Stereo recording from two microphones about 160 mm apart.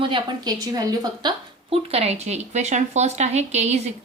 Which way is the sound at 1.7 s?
40° right (ahead or behind).